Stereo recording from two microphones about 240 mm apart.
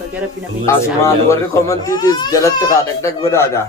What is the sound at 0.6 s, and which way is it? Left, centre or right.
Speech, centre.